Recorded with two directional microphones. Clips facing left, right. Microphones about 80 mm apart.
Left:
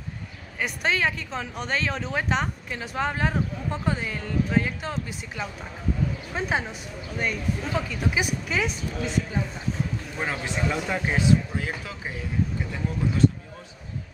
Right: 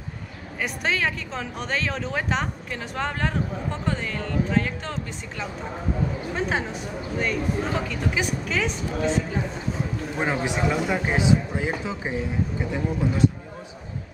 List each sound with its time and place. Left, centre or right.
0.6 s a woman's voice: centre
6.3 s a woman's voice: centre
10.1 s speech: centre